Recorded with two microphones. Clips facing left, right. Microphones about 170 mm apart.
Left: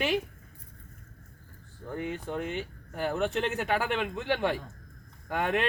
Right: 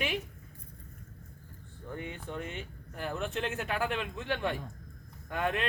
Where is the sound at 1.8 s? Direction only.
75° left (ahead or behind).